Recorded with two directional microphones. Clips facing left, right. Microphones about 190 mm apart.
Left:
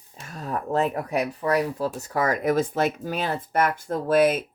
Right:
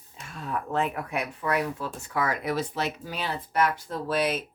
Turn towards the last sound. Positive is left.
turn(degrees=50)  # may be behind; listen again after turning